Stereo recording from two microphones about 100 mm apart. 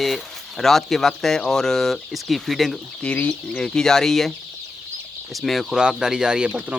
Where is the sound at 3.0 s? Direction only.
10° left (ahead or behind).